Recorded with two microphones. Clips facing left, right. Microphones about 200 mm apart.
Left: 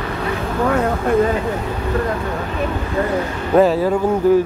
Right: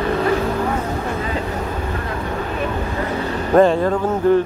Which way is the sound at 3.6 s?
5° left (ahead or behind).